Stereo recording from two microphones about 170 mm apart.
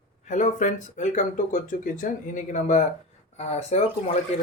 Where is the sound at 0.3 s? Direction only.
45° left (ahead or behind).